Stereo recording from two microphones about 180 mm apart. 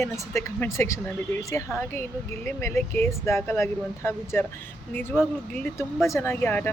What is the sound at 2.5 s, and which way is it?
Speech, 15° left (ahead or behind).